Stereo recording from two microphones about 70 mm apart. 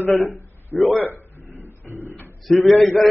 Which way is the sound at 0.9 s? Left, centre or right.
Left.